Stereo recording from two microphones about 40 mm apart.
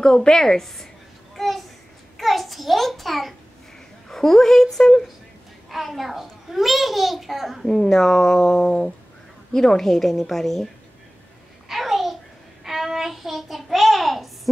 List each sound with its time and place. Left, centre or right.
0.0 s speech: centre
1.3 s a sound: centre
2.1 s a child's voice: centre
5.7 s a child's voice: centre
7.6 s speech: centre
11.7 s babbling: centre
12.6 s a child's voice: centre